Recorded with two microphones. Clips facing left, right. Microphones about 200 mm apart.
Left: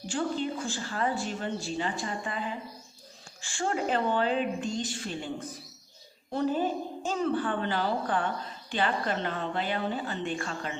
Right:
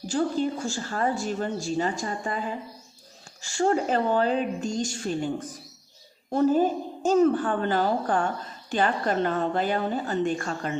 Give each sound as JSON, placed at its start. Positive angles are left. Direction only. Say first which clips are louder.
{"t": 0.1, "sound": "speech", "louder": "right 5 dB", "side_deg": -40}